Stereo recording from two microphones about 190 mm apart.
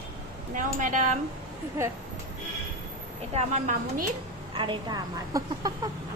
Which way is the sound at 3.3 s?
35° right (ahead or behind).